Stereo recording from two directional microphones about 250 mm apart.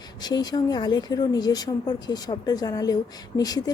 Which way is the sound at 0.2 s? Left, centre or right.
Centre.